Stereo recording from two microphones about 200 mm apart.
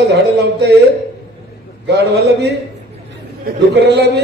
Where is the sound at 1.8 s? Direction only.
60° right (ahead or behind).